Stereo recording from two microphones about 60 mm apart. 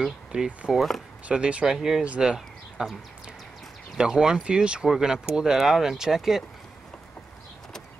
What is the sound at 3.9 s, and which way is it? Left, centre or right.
Speech, centre.